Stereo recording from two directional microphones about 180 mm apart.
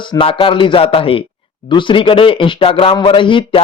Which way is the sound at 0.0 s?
25° left (ahead or behind).